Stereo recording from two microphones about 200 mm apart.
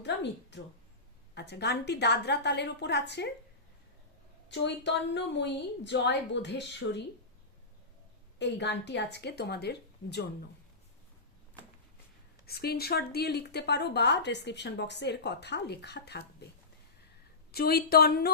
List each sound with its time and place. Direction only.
0.0 s a sound: 60° left (ahead or behind)
1.4 s speech: 60° left (ahead or behind)
4.4 s speech: 60° left (ahead or behind)
8.4 s speech: 60° left (ahead or behind)
12.5 s speech: 50° left (ahead or behind)
17.5 s speech: 50° left (ahead or behind)